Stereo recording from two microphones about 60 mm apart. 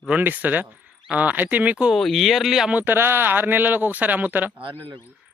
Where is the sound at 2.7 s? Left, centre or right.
Right.